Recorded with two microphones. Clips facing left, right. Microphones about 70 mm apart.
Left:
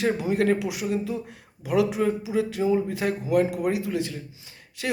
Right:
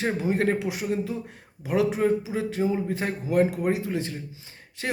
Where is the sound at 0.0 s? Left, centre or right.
Right.